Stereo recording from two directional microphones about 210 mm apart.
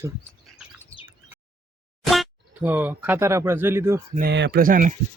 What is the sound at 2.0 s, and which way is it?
Speech, centre (ahead or behind).